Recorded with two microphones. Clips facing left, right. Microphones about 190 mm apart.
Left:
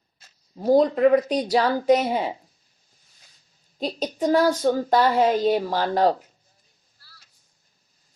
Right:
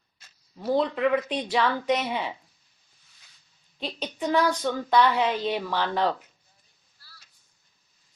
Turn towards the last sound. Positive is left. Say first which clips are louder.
# left 5 dB
turn(degrees=40)  # may be behind; listen again after turning